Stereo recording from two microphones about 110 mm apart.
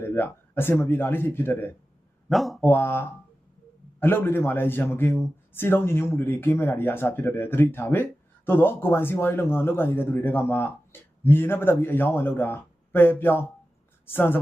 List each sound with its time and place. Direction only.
0.0 s a man's voice: 20° left (ahead or behind)
2.3 s speech: centre (ahead or behind)
2.6 s a man's voice: 20° left (ahead or behind)